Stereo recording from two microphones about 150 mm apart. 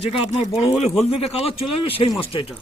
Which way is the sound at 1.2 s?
40° left (ahead or behind).